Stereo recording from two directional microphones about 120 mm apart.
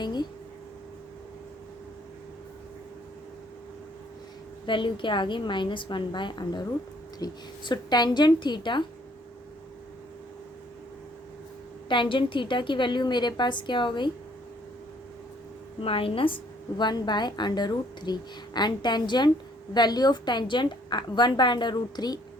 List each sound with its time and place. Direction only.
0.0 s a sound: 35° left (ahead or behind)
4.6 s a woman's voice: 45° left (ahead or behind)
11.9 s a woman's voice: 45° left (ahead or behind)
15.8 s a woman's voice: 50° left (ahead or behind)